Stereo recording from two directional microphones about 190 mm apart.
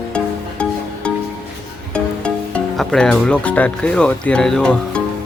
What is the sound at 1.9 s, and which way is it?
Speech, 5° left (ahead or behind).